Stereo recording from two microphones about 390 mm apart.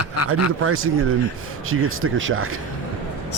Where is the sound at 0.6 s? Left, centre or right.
Right.